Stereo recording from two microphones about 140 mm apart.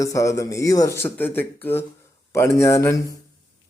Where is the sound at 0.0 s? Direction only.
25° left (ahead or behind).